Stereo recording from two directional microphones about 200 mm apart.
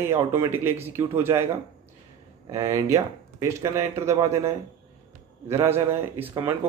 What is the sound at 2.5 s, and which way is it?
A man's voice, 15° right (ahead or behind).